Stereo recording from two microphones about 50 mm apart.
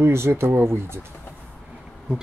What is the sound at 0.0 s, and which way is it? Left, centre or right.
Speech, right.